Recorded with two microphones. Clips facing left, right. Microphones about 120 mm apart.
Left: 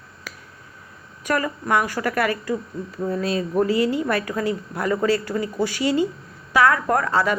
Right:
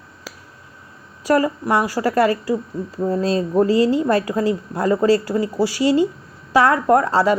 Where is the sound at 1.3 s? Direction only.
30° right (ahead or behind).